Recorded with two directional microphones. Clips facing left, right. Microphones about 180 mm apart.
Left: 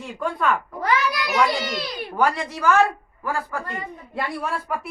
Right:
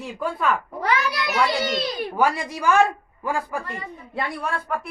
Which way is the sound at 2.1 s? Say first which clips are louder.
Left 1 dB; 10° right (ahead or behind).